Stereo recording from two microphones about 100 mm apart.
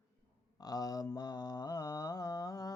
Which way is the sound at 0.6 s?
40° left (ahead or behind).